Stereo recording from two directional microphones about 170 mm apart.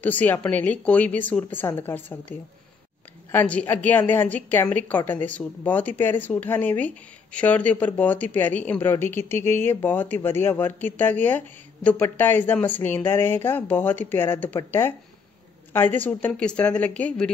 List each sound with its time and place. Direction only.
0.0 s speech: 10° left (ahead or behind)
3.3 s speech: 10° left (ahead or behind)